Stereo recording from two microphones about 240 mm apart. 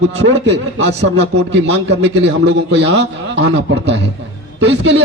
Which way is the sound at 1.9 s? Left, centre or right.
Right.